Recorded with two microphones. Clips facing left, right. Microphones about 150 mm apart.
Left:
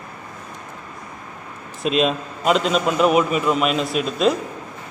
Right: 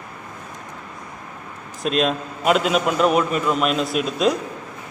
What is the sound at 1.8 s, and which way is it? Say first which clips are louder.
A man's voice: left 1 dB; centre (ahead or behind).